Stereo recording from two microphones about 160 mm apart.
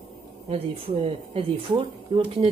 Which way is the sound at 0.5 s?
40° right (ahead or behind).